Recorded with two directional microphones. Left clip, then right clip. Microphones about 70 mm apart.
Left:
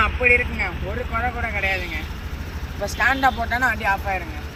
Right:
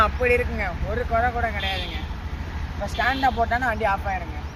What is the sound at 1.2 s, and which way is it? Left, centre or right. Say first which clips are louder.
Speech: even; right.